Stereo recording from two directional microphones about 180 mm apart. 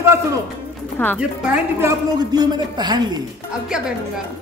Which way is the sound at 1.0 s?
10° left (ahead or behind).